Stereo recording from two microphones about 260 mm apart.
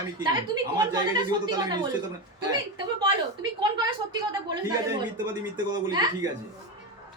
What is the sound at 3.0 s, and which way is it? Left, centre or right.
Speech, centre.